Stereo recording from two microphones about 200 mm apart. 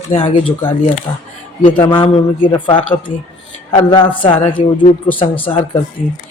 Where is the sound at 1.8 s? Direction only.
25° left (ahead or behind).